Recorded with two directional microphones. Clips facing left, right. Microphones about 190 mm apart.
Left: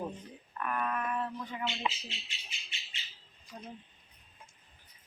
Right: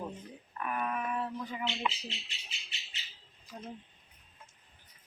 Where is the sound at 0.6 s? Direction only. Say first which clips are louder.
Left 1 dB; 5° right (ahead or behind).